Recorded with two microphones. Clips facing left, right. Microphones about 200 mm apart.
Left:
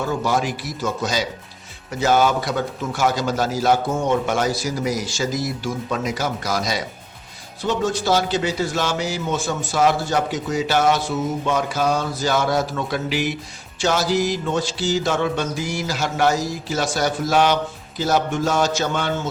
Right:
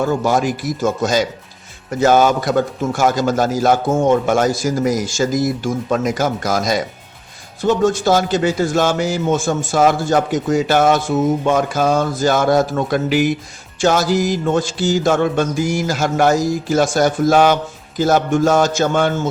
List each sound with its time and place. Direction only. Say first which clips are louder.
0.1 s speech: right 5 dB; 45° right (ahead or behind)